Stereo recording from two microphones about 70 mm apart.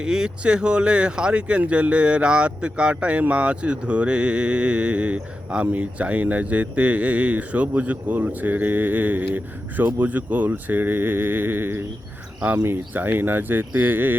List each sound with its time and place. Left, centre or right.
0.0 s speech: centre; by 14.2 s right